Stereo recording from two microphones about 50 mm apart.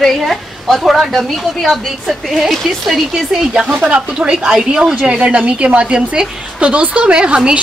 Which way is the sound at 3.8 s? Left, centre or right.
Right.